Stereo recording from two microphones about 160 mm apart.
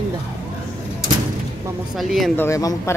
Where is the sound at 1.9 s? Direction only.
Centre (ahead or behind).